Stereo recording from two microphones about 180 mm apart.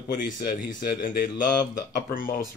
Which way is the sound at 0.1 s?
50° left (ahead or behind).